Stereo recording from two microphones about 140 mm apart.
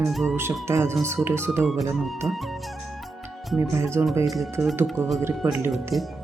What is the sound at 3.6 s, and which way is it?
Speech, 20° right (ahead or behind).